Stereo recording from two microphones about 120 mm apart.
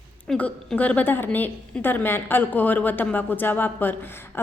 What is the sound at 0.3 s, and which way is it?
A woman's voice, 10° left (ahead or behind).